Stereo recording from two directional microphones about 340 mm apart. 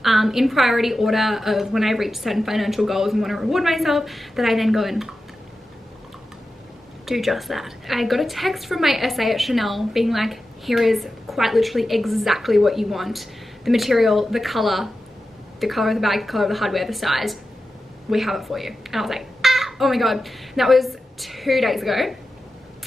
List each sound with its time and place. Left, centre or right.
0.0 s a woman's voice: centre
7.1 s a woman's voice: centre